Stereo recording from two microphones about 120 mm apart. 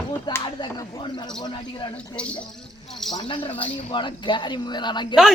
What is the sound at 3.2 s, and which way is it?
Speech, 45° left (ahead or behind).